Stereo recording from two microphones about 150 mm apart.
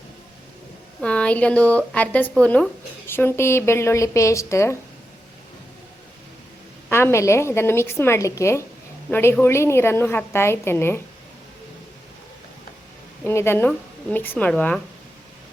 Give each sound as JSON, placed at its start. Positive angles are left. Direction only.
{"t": 1.0, "sound": "a woman's voice", "side_deg": 10}
{"t": 6.9, "sound": "a woman's voice", "side_deg": 15}
{"t": 13.2, "sound": "a woman's voice", "side_deg": 15}